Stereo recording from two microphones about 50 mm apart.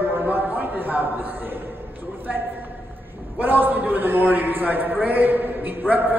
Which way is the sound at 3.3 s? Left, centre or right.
Right.